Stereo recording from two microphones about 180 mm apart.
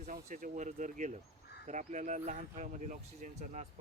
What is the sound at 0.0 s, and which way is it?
Speech, 45° right (ahead or behind).